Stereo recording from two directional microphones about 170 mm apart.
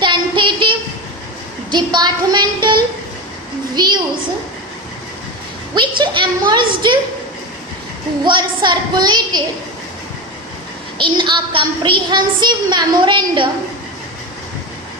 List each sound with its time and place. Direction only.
0.0 s child singing: 30° right (ahead or behind)
1.7 s a woman's voice: 25° right (ahead or behind)
5.7 s a woman's voice: 30° right (ahead or behind)
8.2 s a woman's voice: 25° right (ahead or behind)
10.9 s a woman's voice: 30° right (ahead or behind)